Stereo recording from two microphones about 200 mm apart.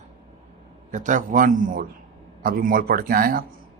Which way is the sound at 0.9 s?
40° right (ahead or behind).